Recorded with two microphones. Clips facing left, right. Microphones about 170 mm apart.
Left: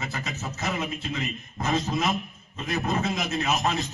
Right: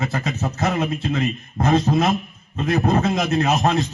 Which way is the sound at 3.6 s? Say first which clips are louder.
Right 8 dB; 45° right (ahead or behind).